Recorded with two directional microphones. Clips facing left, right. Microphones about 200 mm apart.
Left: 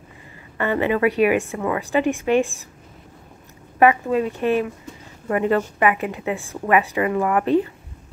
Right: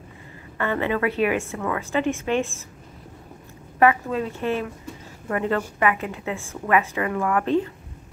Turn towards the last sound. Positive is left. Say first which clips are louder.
# left 3 dB
turn(degrees=15)  # may be behind; listen again after turning